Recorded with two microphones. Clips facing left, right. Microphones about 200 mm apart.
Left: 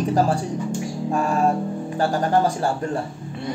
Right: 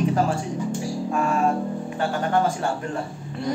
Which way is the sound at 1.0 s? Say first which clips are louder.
Left 2 dB; 35° left (ahead or behind).